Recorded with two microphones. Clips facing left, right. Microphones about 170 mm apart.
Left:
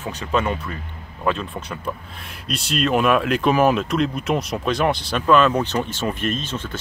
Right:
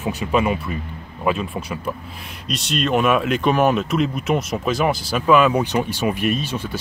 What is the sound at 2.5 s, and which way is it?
Speech, centre (ahead or behind).